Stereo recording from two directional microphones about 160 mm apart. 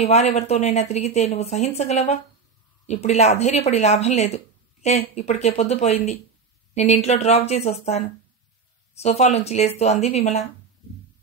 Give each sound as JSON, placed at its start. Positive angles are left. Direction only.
{"t": 0.0, "sound": "a woman's voice", "side_deg": 45}
{"t": 9.0, "sound": "a woman's voice", "side_deg": 45}